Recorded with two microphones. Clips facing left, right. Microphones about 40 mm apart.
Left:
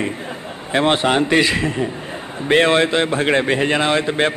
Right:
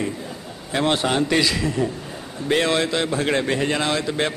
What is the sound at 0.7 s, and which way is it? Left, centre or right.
Speech, left.